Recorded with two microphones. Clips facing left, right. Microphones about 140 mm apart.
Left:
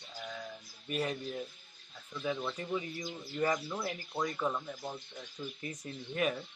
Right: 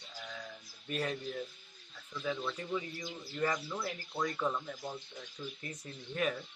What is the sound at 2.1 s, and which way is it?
Speech, 15° left (ahead or behind).